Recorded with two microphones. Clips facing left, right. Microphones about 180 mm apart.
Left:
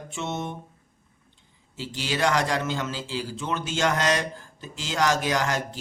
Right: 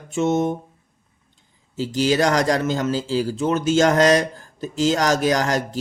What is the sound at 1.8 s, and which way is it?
Speech, 40° right (ahead or behind).